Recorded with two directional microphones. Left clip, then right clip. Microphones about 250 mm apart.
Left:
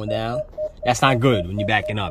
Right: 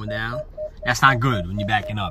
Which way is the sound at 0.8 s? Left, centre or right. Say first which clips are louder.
Right 1 dB; left.